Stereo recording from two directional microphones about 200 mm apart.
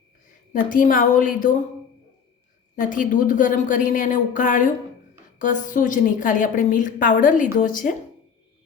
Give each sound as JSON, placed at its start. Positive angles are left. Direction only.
{"t": 0.7, "sound": "speech", "side_deg": 45}
{"t": 2.7, "sound": "a woman's voice", "side_deg": 40}